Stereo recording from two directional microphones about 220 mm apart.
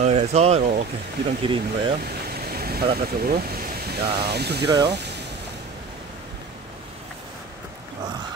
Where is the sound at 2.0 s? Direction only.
45° right (ahead or behind).